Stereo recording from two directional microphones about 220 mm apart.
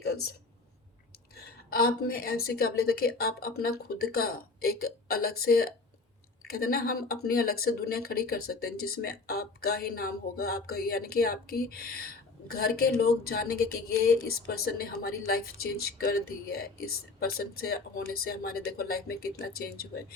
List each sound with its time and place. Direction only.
1.7 s a woman's voice: 45° left (ahead or behind)